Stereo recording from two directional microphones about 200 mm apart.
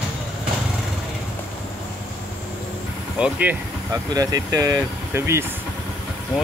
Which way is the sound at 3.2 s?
5° right (ahead or behind).